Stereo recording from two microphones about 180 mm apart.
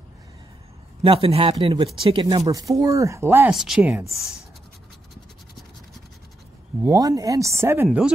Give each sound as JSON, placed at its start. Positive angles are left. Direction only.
{"t": 1.0, "sound": "speech", "side_deg": -30}
{"t": 6.8, "sound": "speech", "side_deg": -20}